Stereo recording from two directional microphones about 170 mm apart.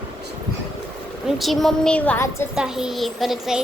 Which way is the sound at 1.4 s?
Centre (ahead or behind).